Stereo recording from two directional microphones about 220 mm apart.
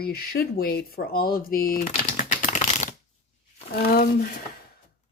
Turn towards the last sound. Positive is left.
turn(degrees=45)  # may be behind; listen again after turning